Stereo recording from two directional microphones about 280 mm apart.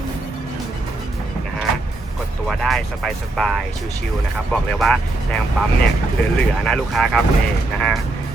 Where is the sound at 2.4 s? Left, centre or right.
Centre.